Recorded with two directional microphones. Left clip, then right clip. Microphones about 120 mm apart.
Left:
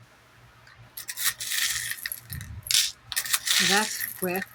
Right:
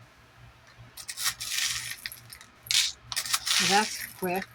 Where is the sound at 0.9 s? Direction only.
25° left (ahead or behind).